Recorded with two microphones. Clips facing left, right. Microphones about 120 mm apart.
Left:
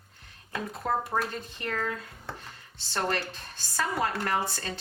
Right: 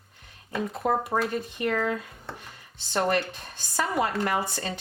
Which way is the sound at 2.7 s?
15° right (ahead or behind).